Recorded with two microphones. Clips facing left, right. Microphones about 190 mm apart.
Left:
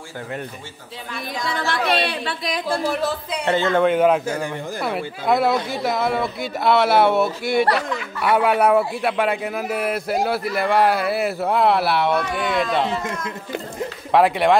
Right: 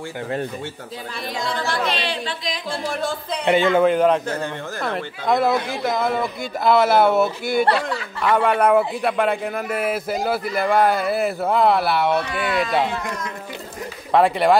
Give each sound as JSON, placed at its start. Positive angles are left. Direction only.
{"t": 1.7, "sound": "speech", "side_deg": 60}
{"t": 3.0, "sound": "a man's voice", "side_deg": 5}
{"t": 3.4, "sound": "a man's voice", "side_deg": -15}
{"t": 3.8, "sound": "a man's voice", "side_deg": 0}
{"t": 7.6, "sound": "speech", "side_deg": -30}
{"t": 8.2, "sound": "a man's voice", "side_deg": 5}
{"t": 14.1, "sound": "a man's voice", "side_deg": 0}